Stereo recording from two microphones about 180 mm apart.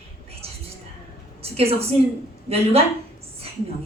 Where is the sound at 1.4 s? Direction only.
35° right (ahead or behind).